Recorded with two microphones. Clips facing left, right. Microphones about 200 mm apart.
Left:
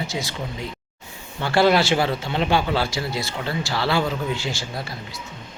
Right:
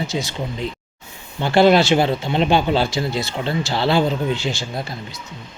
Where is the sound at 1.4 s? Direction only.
20° right (ahead or behind).